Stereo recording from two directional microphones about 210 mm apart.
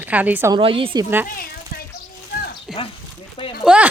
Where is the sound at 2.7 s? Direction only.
5° right (ahead or behind).